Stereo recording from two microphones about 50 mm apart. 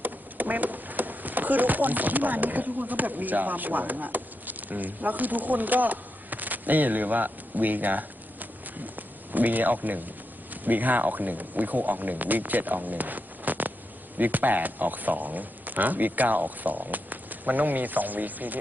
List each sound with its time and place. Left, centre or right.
0.0 s speech: right